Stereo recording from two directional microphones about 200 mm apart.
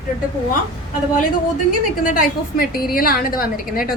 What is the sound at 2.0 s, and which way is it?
A woman's voice, 45° left (ahead or behind).